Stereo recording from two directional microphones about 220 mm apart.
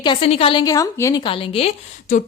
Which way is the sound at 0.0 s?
25° left (ahead or behind).